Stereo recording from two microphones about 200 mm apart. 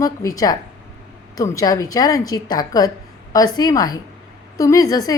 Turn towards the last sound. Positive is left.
turn(degrees=20)  # may be behind; listen again after turning